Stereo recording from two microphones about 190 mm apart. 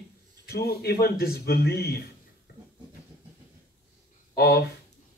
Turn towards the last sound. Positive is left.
turn(degrees=55)  # may be behind; listen again after turning